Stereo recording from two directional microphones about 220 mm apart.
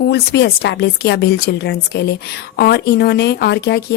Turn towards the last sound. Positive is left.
turn(degrees=50)  # may be behind; listen again after turning